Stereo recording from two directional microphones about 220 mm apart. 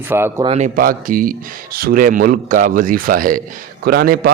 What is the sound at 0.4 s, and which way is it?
Speech, 30° right (ahead or behind).